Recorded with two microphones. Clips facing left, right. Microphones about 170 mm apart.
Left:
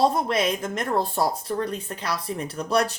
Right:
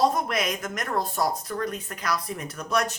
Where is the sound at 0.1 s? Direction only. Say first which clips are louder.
Left 3 dB; 30° left (ahead or behind).